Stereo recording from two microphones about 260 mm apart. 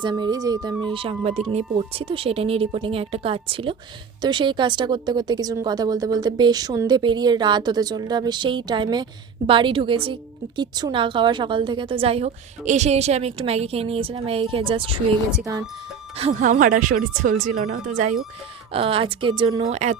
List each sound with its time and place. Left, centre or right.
0.0 s a woman's voice: centre
15.3 s speech: centre
16.1 s a woman's voice: right